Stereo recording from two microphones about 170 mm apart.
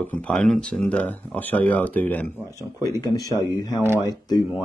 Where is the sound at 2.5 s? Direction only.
20° left (ahead or behind).